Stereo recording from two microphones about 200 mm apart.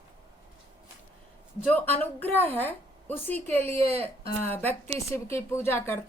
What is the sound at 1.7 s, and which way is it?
A woman's voice, 10° left (ahead or behind).